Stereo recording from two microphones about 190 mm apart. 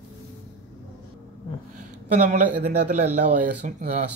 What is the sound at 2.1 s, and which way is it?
Speech, 40° right (ahead or behind).